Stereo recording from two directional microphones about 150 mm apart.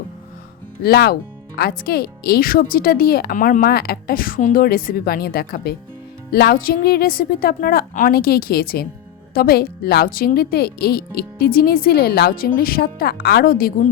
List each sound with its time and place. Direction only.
0.8 s speech: 90° left
12.5 s a woman's voice: 75° left (ahead or behind)